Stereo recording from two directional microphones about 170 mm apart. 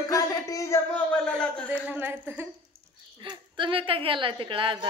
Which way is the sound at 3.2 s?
30° right (ahead or behind).